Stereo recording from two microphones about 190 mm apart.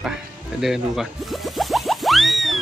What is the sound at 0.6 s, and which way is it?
Music, centre (ahead or behind).